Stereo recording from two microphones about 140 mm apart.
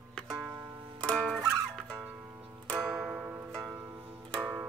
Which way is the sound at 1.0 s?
5° left (ahead or behind).